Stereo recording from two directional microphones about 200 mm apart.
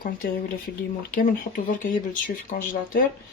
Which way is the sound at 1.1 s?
40° left (ahead or behind).